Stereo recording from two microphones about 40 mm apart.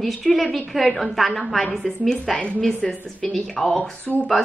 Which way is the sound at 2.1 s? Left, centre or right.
Centre.